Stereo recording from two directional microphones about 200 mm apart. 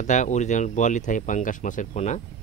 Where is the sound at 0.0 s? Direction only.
40° left (ahead or behind).